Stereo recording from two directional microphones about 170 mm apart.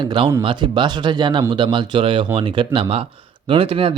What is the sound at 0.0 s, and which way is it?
Speech, 25° right (ahead or behind).